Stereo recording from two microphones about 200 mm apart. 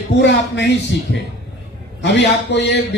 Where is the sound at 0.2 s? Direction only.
60° left (ahead or behind).